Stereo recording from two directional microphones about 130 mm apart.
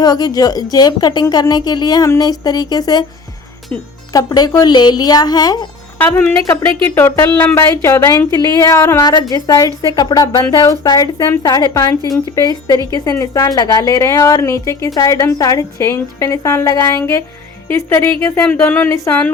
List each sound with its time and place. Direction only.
0.0 s a woman's voice: 30° left (ahead or behind)
4.1 s a woman's voice: 30° left (ahead or behind)
6.8 s a woman's voice: 20° left (ahead or behind)